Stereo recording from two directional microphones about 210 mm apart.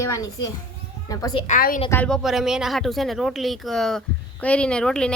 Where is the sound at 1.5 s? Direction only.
40° left (ahead or behind).